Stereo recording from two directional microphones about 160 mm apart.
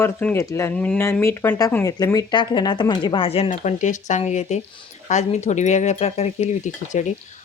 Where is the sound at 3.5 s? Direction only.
50° left (ahead or behind).